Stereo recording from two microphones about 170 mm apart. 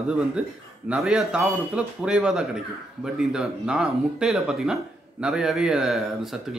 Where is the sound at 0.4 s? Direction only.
5° right (ahead or behind).